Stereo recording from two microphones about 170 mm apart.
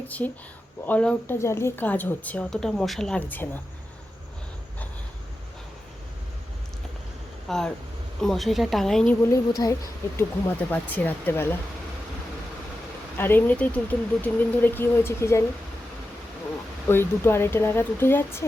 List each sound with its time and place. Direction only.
0.2 s speech: 10° left (ahead or behind)
7.4 s speech: 5° left (ahead or behind)
9.6 s speech: 20° left (ahead or behind)
10.7 s speech: 10° left (ahead or behind)
13.1 s speech: 10° left (ahead or behind)
16.9 s speech: 15° left (ahead or behind)